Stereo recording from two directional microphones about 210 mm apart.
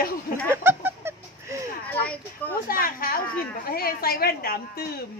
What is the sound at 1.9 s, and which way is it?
Speech, 10° left (ahead or behind).